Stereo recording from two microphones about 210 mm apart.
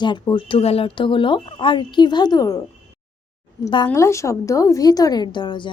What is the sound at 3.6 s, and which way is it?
A woman's voice, 20° left (ahead or behind).